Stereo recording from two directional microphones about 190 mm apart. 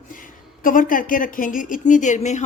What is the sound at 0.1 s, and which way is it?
Speech, 45° left (ahead or behind).